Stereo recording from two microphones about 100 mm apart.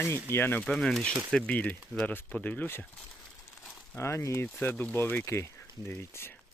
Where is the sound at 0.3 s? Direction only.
20° left (ahead or behind).